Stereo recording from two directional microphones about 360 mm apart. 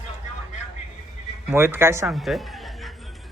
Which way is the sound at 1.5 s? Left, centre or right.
Centre.